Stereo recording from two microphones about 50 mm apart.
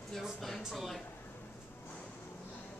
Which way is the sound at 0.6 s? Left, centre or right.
Centre.